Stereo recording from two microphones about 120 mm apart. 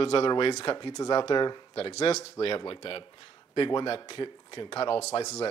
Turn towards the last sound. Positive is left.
turn(degrees=55)  # may be behind; listen again after turning